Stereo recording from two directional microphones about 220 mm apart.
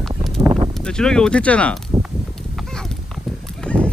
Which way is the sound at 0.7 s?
5° left (ahead or behind).